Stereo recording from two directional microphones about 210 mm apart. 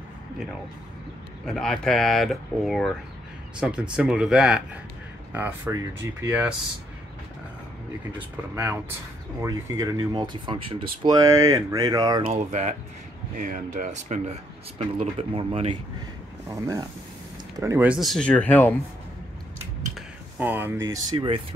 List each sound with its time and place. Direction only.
1.4 s speech: centre (ahead or behind)
8.2 s speech: 10° right (ahead or behind)
12.3 s speech: 35° right (ahead or behind)
16.4 s speech: 15° right (ahead or behind); by 18.8 s 10° left (ahead or behind)
20.3 s speech: 10° right (ahead or behind)